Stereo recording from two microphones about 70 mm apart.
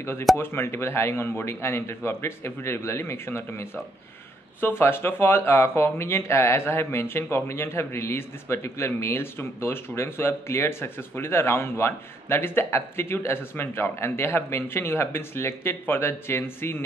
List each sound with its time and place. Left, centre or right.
0.4 s speech: left